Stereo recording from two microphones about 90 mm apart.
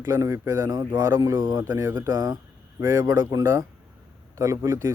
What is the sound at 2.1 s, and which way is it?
Speech, 45° right (ahead or behind).